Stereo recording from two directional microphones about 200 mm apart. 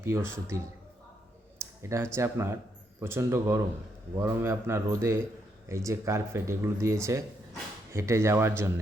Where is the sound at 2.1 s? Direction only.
15° right (ahead or behind).